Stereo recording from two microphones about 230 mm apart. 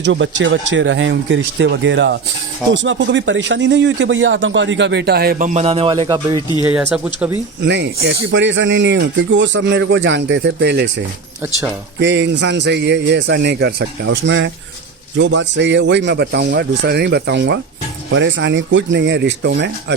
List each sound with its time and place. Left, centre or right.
0.0 s speech: right
5.5 s speech: right
6.6 s speech: centre
7.6 s speech: right